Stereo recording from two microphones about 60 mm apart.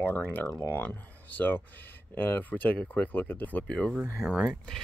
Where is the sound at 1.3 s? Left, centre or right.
Left.